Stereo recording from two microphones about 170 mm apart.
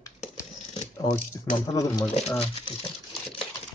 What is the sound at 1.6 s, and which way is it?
Speech, 20° left (ahead or behind).